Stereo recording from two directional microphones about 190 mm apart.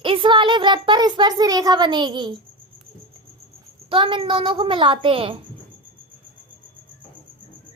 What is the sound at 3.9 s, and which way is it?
A child's voice, 25° right (ahead or behind).